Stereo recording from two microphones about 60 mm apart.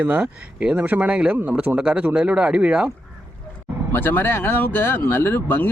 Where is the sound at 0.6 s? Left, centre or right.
Right.